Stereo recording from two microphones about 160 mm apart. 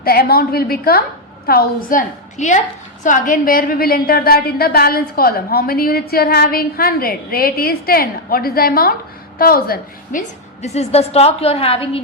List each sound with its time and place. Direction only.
0.0 s a woman's voice: 75° left (ahead or behind); by 12.0 s 35° left (ahead or behind)